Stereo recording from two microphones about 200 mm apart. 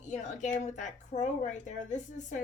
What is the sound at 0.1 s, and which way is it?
Speech, 40° left (ahead or behind).